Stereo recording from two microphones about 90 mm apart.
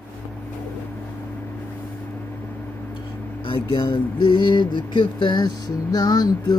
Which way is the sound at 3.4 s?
55° left (ahead or behind).